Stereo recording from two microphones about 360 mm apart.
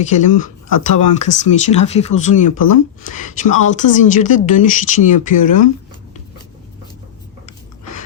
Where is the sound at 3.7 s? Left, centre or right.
Centre.